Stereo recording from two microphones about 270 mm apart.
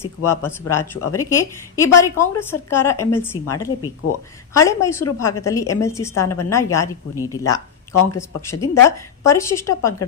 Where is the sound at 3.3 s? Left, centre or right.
Left.